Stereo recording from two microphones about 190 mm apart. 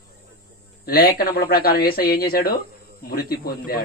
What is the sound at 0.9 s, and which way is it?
Speech, 50° left (ahead or behind).